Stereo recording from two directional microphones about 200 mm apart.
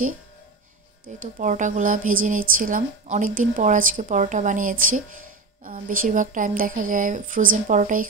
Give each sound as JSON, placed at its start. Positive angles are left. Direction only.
{"t": 1.0, "sound": "a woman's voice", "side_deg": -40}